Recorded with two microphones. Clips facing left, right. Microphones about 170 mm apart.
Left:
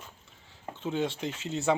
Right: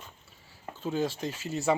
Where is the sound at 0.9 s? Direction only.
5° right (ahead or behind).